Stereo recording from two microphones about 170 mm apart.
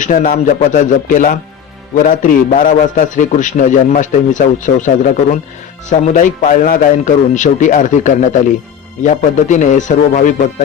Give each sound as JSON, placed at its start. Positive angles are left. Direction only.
{"t": 0.0, "sound": "a man's voice", "side_deg": 50}
{"t": 5.9, "sound": "a man's voice", "side_deg": 50}